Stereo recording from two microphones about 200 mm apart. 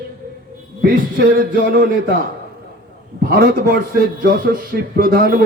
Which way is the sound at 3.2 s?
50° right (ahead or behind).